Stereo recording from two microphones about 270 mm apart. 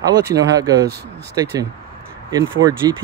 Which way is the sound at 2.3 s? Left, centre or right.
Centre.